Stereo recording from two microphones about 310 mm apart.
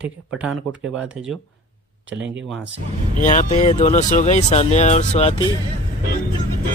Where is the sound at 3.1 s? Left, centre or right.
Left.